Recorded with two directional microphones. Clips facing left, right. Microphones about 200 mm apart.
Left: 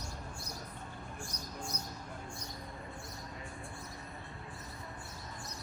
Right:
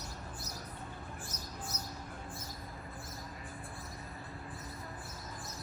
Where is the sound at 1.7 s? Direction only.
5° right (ahead or behind).